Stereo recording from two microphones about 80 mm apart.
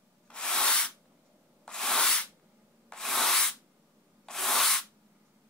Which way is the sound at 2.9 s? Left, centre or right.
Centre.